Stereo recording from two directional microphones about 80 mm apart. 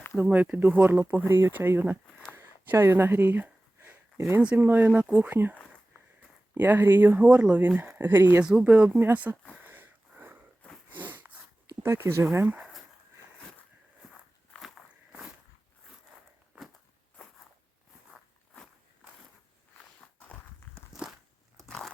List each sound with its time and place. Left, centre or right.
0.2 s speech: centre
2.3 s a sound: right
4.4 s speech: centre
8.4 s speech: centre
9.6 s wheeze: right
10.8 s a sound: right
11.8 s speech: right
16.5 s walk: right
20.0 s walk: centre
20.9 s biting: centre
21.7 s a sound: centre